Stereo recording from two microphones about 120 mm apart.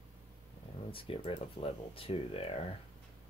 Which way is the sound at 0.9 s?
50° left (ahead or behind).